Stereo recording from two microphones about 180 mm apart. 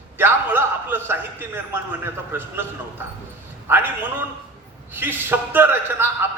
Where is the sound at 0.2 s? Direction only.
10° right (ahead or behind).